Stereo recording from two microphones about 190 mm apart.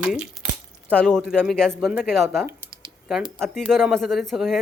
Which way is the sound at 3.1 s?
Centre (ahead or behind).